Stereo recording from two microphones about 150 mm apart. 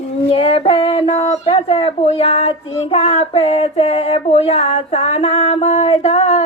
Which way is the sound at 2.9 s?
40° left (ahead or behind).